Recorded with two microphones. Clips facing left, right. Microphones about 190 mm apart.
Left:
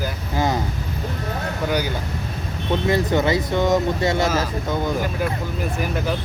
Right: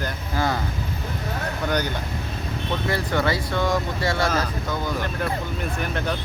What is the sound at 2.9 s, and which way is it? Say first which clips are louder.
Speech: left 5 dB; 20° left (ahead or behind).